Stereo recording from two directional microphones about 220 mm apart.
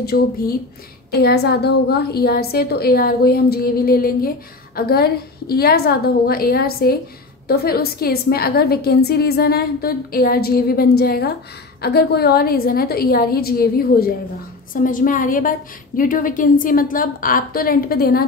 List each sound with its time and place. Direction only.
0.0 s a woman's voice: 45° left (ahead or behind)